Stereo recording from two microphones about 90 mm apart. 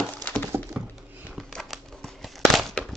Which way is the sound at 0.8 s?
10° right (ahead or behind).